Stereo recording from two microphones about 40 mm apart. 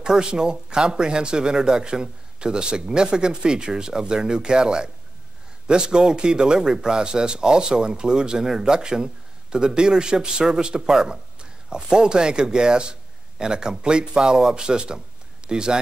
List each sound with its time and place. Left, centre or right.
0.0 s speech: centre